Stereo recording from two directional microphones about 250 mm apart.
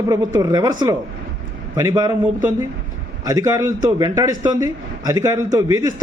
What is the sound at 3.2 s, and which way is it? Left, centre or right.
A man's voice, centre.